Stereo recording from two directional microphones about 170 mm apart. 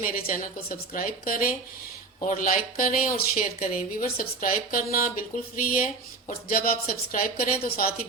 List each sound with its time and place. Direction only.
0.0 s speech: 55° left (ahead or behind)